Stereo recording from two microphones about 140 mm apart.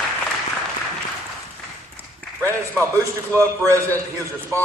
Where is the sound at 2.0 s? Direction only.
15° right (ahead or behind).